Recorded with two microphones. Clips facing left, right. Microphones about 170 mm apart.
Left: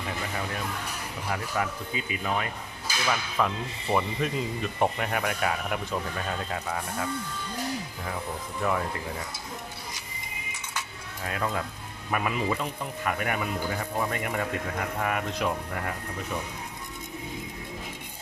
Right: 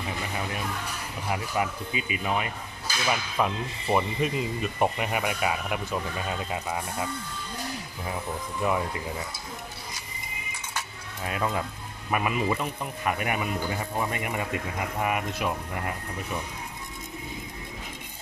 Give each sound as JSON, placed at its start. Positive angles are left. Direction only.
{"t": 1.3, "sound": "speech", "side_deg": -10}
{"t": 8.6, "sound": "speech", "side_deg": -15}
{"t": 11.2, "sound": "speech", "side_deg": -15}